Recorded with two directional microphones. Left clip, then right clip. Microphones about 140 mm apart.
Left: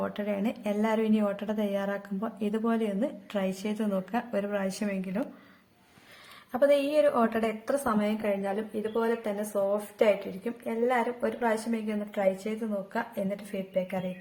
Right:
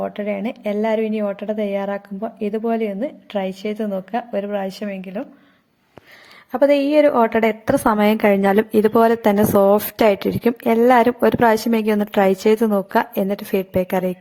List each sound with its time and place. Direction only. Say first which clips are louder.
0.0 s a woman's voice: right 8 dB; 25° right (ahead or behind)
6.5 s a woman's voice: right 9 dB; 45° right (ahead or behind)
7.6 s a woman's voice: right 12 dB; 75° right (ahead or behind); by 14.0 s 90° right